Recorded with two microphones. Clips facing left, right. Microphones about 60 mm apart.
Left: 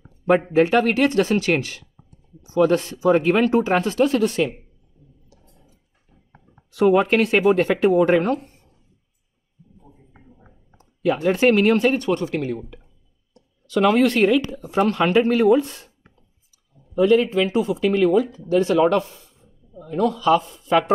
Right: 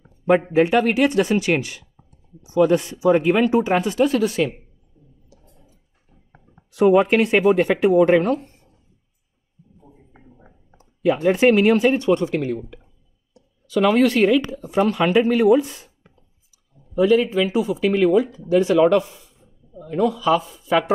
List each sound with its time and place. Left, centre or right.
0.5 s speech: centre
4.9 s a sound: centre
7.1 s speech: right
7.5 s speech: centre
9.8 s a sound: centre
11.2 s speech: centre
13.7 s speech: centre
14.9 s speech: centre
16.9 s speech: centre
18.9 s a sound: centre
19.9 s speech: centre